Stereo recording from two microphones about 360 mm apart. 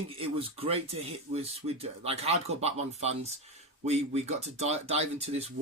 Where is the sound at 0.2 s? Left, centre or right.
Centre.